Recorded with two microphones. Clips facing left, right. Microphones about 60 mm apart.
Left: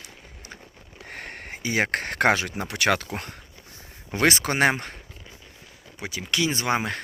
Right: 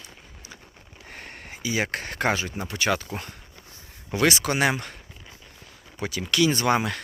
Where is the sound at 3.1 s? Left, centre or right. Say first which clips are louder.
Left 1 dB; left.